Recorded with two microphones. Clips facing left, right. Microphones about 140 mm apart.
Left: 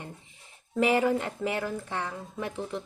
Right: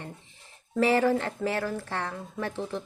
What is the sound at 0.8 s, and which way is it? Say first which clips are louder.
A woman's voice: right 1 dB; 15° left (ahead or behind).